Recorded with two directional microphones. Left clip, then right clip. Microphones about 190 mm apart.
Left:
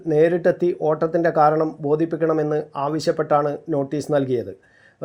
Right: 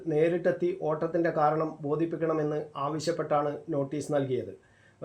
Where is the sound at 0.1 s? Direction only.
25° left (ahead or behind).